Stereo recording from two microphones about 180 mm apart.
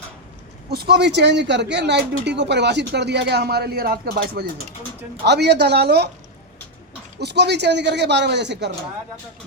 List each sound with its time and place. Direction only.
0.7 s speech: 65° right (ahead or behind)
7.2 s speech: 70° right (ahead or behind)